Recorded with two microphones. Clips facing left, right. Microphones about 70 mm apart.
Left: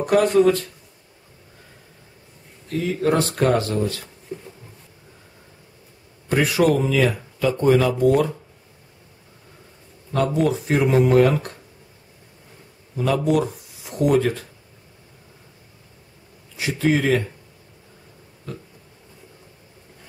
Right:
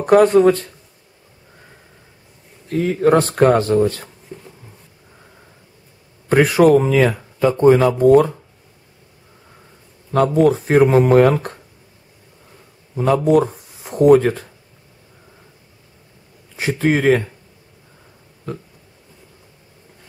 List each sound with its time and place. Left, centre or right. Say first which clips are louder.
0.0 s speech: right 5 dB; right
2.8 s speech: right 6 dB; right
4.3 s insect: left 3 dB; centre
6.2 s speech: right 6 dB; right
10.4 s speech: right 9 dB; right
12.9 s speech: right 5 dB; right
16.5 s speech: right 3 dB; right